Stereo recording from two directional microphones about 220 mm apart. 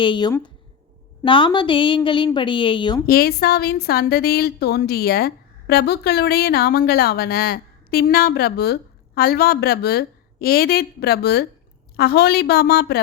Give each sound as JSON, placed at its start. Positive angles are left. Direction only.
{"t": 0.0, "sound": "a woman's voice", "side_deg": 20}
{"t": 3.1, "sound": "a woman's voice", "side_deg": 45}